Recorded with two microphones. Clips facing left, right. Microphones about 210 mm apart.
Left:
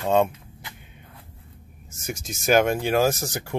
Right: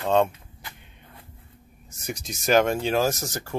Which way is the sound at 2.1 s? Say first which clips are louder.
Left 1 dB; 50° left (ahead or behind).